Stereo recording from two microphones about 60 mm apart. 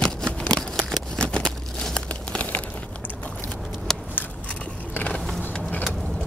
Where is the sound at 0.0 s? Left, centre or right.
Centre.